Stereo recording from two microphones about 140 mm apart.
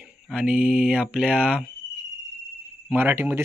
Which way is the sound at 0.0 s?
5° right (ahead or behind).